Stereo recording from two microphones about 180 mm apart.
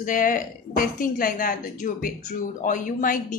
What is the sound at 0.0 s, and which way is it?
A woman's voice, 50° left (ahead or behind).